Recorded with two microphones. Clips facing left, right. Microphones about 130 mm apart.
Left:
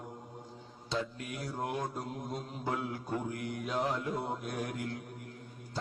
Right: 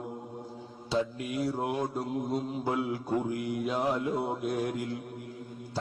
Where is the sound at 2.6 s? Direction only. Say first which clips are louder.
Right 5 dB; 5° right (ahead or behind).